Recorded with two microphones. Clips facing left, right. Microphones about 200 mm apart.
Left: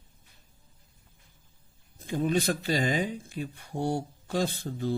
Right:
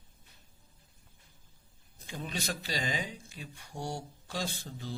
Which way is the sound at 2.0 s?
50° left (ahead or behind).